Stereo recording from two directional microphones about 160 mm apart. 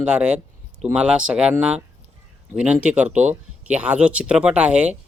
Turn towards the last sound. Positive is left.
turn(degrees=-5)  # may be behind; listen again after turning